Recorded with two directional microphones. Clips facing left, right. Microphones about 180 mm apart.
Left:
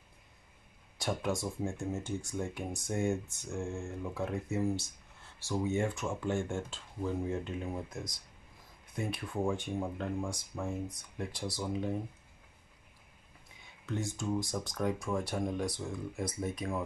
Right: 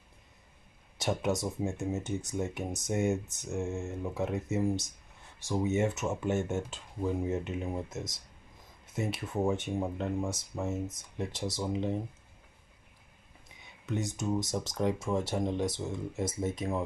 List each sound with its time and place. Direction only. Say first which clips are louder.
0.9 s speech: right 3 dB; 20° right (ahead or behind)
13.8 s speech: right 3 dB; 20° right (ahead or behind)